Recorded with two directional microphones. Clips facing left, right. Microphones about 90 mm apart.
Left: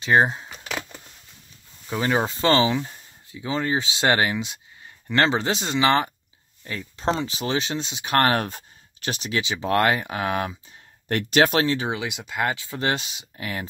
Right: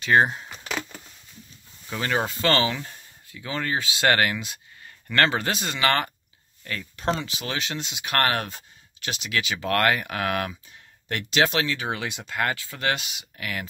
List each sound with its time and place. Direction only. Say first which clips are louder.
0.0 s speech: left 1 dB; 20° left (ahead or behind)
0.4 s a sound: even; 5° left (ahead or behind)
1.9 s speech: left 3 dB; 20° left (ahead or behind); by 9.4 s 35° left (ahead or behind)
9.4 s speech: left 2 dB; 25° left (ahead or behind)
11.1 s speech: left 4 dB; 45° left (ahead or behind)
11.9 s speech: left 1 dB; 15° left (ahead or behind); by 13.7 s 30° left (ahead or behind)